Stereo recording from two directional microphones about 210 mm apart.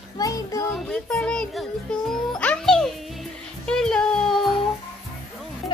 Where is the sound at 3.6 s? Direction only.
5° left (ahead or behind).